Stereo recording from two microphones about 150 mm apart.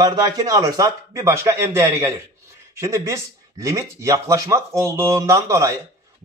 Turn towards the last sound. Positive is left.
turn(degrees=-20)  # may be behind; listen again after turning